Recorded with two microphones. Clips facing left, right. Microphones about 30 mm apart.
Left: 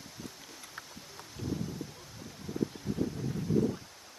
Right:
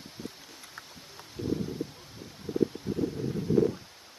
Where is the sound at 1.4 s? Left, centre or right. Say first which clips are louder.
Right 5 dB; right.